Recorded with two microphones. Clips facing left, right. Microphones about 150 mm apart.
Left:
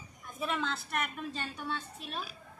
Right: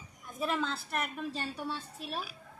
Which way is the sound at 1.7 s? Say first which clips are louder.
Even; 5° right (ahead or behind).